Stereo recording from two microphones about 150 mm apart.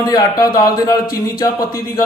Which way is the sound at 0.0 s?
25° left (ahead or behind).